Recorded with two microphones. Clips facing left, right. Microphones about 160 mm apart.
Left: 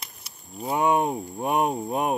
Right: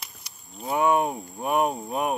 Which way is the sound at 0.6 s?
20° left (ahead or behind).